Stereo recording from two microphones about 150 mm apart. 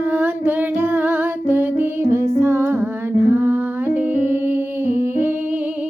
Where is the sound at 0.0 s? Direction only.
10° right (ahead or behind).